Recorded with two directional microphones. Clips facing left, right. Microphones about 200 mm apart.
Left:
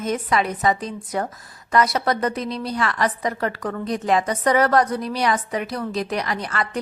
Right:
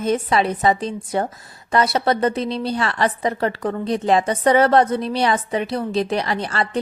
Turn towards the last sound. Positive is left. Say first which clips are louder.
# right 3 dB
turn(degrees=-30)  # may be behind; listen again after turning